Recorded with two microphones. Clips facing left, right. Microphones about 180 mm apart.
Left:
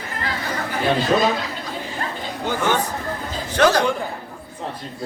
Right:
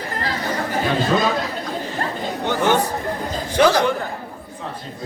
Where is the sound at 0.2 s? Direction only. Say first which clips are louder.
Right 2 dB; 40° right (ahead or behind).